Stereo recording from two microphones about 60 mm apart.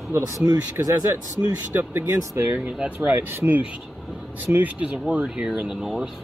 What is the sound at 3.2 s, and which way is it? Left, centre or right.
Speech, right.